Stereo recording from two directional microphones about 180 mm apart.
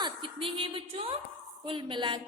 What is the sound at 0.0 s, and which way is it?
A woman's voice, 30° right (ahead or behind).